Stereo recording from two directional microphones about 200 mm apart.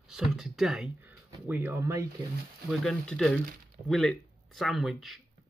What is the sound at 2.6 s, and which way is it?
Speech, 5° left (ahead or behind).